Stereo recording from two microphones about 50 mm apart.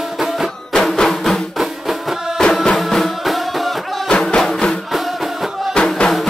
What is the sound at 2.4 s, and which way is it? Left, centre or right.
Music, centre.